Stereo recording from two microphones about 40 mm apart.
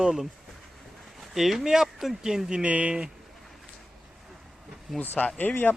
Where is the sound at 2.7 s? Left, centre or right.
Right.